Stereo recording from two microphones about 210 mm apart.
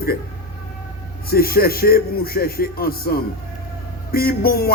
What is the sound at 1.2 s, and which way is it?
A man's voice, 45° left (ahead or behind).